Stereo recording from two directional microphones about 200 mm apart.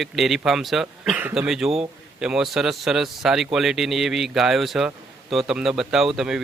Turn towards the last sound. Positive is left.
turn(degrees=-5)  # may be behind; listen again after turning